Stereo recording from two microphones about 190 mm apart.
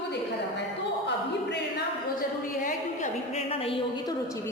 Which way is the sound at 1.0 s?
65° left (ahead or behind).